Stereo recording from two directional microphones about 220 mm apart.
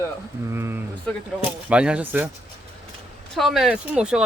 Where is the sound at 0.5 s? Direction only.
10° right (ahead or behind).